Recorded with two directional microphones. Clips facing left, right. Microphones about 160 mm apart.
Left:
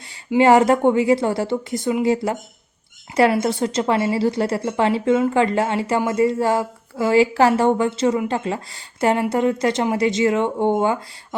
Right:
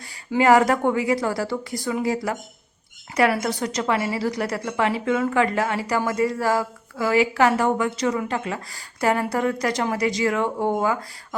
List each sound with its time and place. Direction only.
0.3 s a woman's voice: 25° left (ahead or behind)